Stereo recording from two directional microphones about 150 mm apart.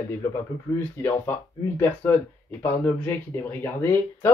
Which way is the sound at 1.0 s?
15° left (ahead or behind).